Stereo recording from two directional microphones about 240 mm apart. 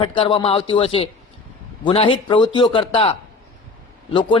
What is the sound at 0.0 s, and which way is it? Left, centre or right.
Speech, left.